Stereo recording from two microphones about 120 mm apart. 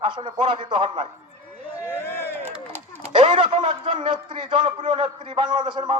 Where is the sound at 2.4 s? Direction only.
20° right (ahead or behind).